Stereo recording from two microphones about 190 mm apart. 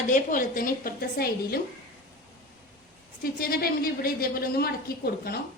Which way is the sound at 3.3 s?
55° left (ahead or behind).